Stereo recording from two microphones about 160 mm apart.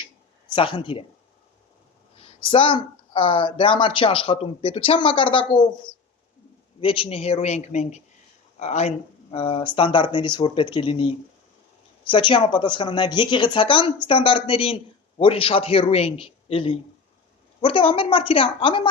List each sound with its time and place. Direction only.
0.5 s speech: 30° left (ahead or behind)
2.1 s speech: 35° left (ahead or behind)